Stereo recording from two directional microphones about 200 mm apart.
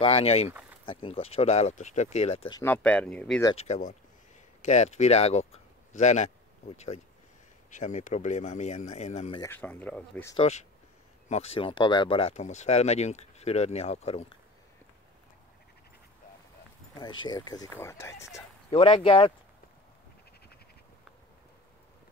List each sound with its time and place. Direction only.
0.0 s speech: 30° left (ahead or behind)
0.5 s speech: 10° right (ahead or behind)
0.8 s speech: 25° left (ahead or behind)
2.5 s speech: 10° left (ahead or behind)
3.5 s speech: 35° left (ahead or behind)
7.7 s speech: 40° left (ahead or behind)
9.4 s speech: 10° left (ahead or behind)
10.3 s speech: 30° left (ahead or behind)
17.2 s speech: 20° left (ahead or behind)
18.7 s speech: 25° left (ahead or behind)